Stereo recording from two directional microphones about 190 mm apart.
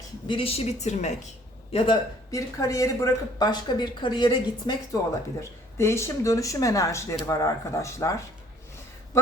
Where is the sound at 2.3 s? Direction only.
15° left (ahead or behind).